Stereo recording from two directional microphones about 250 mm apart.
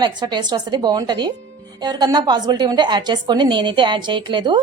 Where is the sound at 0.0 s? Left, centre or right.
Centre.